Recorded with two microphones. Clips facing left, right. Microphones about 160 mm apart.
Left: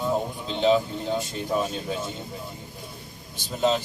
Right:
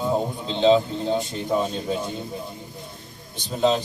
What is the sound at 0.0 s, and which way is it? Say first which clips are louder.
Speech: right 2 dB; 20° right (ahead or behind).